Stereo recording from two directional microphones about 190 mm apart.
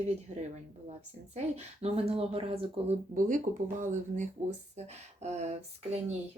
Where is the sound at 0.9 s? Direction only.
35° right (ahead or behind).